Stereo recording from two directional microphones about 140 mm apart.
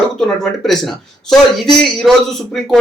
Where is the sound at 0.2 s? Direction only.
5° left (ahead or behind).